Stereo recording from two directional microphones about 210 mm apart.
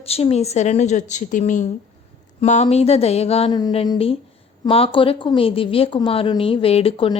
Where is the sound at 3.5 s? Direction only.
20° left (ahead or behind).